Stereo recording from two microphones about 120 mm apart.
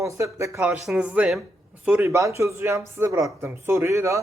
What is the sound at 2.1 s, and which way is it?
Speech, 25° right (ahead or behind).